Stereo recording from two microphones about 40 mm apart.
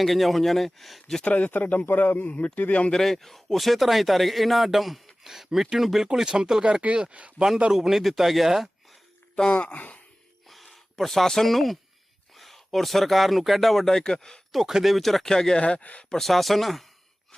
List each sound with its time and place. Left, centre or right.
0.0 s a man's voice: centre
1.2 s speech: left
1.5 s a man's voice: left
2.9 s a man's voice: centre
6.9 s speech: right
7.7 s a man's voice: centre
9.3 s speech: left
9.6 s speech: left
10.5 s speech: centre
13.9 s speech: centre
14.5 s speech: centre
14.9 s speech: centre
15.6 s speech: left
16.0 s a man's voice: centre